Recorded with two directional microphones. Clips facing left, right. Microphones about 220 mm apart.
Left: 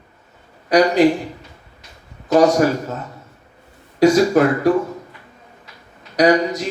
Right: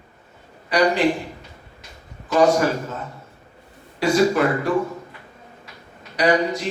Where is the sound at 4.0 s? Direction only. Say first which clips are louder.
Left 5 dB; 40° left (ahead or behind).